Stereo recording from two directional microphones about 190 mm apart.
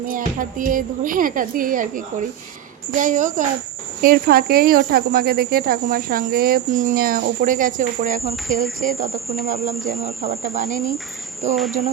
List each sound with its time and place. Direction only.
0.0 s speech: 45° right (ahead or behind)
8.4 s cricket: centre (ahead or behind)
9.0 s cricket: 35° right (ahead or behind)
10.2 s cricket: 35° right (ahead or behind)
10.7 s speech: 15° right (ahead or behind)
11.4 s cricket: 40° right (ahead or behind)